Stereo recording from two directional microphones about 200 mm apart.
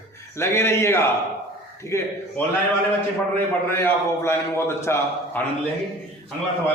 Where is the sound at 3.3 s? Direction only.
10° left (ahead or behind).